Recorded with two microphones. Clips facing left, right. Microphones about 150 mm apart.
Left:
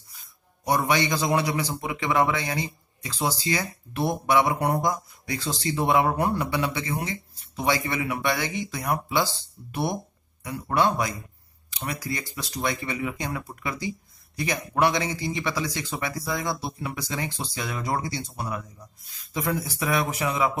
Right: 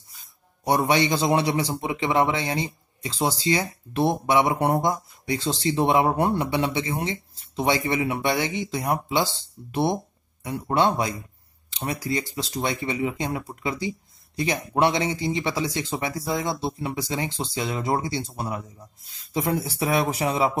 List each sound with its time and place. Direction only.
0.1 s a man's voice: 25° right (ahead or behind)